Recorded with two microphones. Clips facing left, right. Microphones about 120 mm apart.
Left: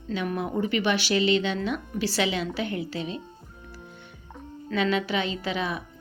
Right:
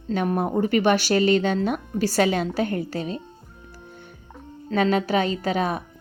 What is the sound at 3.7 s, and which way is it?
Music, 45° right (ahead or behind).